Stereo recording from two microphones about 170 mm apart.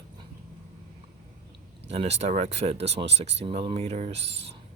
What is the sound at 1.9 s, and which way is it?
Speech, 35° right (ahead or behind).